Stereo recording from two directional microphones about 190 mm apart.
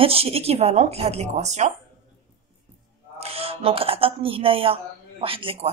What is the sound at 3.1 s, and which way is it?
Speech, 30° right (ahead or behind).